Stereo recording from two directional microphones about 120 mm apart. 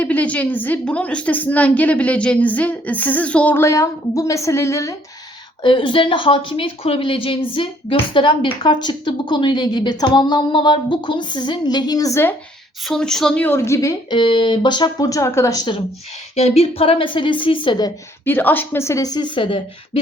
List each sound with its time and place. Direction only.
0.0 s a woman's voice: 10° left (ahead or behind)
5.6 s speech: 45° left (ahead or behind); by 12.3 s 25° left (ahead or behind)
12.8 s a woman's voice: 5° left (ahead or behind)
13.4 s a woman's voice: 20° left (ahead or behind)
14.1 s speech: 45° left (ahead or behind); by 15.6 s 25° left (ahead or behind)
16.3 s a woman's voice: 60° left (ahead or behind); by 17.9 s 40° left (ahead or behind)
18.3 s a woman's voice: 15° left (ahead or behind); by 20.0 s 45° left (ahead or behind)